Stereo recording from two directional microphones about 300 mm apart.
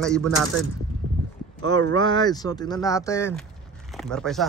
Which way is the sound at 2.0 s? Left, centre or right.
Centre.